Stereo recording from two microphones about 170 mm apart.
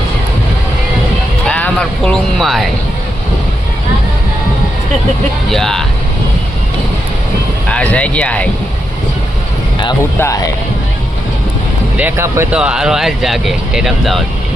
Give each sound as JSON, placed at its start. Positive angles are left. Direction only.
{"t": 1.5, "sound": "a sound", "side_deg": 5}
{"t": 5.5, "sound": "speech", "side_deg": 0}
{"t": 7.7, "sound": "speech", "side_deg": 5}
{"t": 10.2, "sound": "speech", "side_deg": 20}
{"t": 11.9, "sound": "speech", "side_deg": -15}